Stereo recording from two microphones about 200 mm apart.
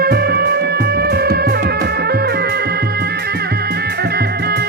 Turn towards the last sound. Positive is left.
turn(degrees=-50)  # may be behind; listen again after turning